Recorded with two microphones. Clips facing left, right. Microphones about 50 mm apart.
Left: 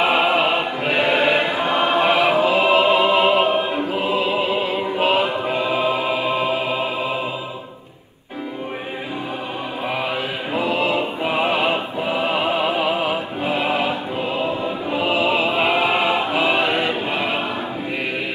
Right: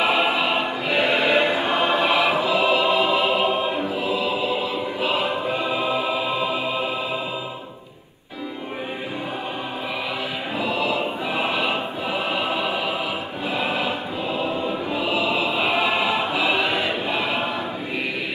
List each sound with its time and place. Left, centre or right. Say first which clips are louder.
0.0 s choir: left 3 dB; left
1.9 s music: left 4 dB; left
3.7 s choir: left 3 dB; left
10.5 s music: left 4 dB; left